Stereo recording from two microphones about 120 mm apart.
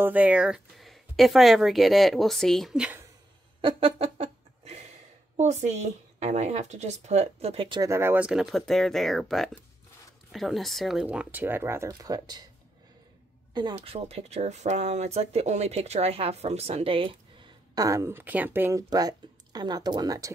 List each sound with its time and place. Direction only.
0.0 s speech: 15° right (ahead or behind)
3.6 s a sound: 50° right (ahead or behind)
5.4 s speech: 70° right (ahead or behind)
7.9 s speech: 20° right (ahead or behind)
13.5 s a sound: 40° right (ahead or behind)
13.7 s speech: 60° right (ahead or behind)
17.7 s speech: 25° right (ahead or behind)